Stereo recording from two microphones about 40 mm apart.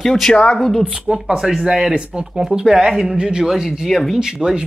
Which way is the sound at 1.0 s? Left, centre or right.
Right.